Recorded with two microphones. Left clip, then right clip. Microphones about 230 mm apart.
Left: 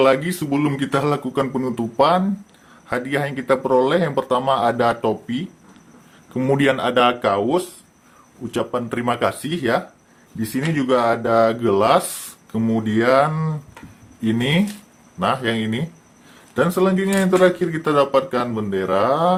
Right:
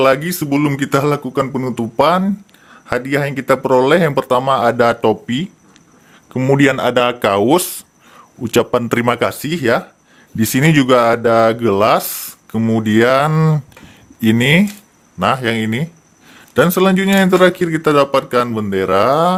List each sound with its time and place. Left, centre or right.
0.0 s speech: right